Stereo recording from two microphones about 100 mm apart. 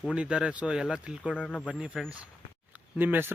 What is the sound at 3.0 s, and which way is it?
Speech, 20° right (ahead or behind).